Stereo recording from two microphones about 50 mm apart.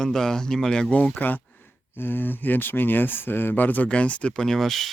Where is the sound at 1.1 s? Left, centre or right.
Left.